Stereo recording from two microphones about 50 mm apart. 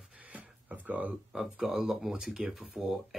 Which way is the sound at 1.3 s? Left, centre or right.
Centre.